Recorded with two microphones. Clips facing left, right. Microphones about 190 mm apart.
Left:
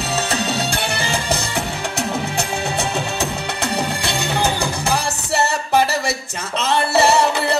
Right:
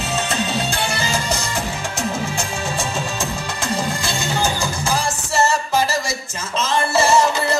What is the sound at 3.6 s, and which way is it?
Music, 65° left (ahead or behind).